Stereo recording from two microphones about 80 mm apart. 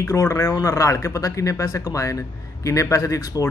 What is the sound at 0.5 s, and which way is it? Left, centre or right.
Speech, left.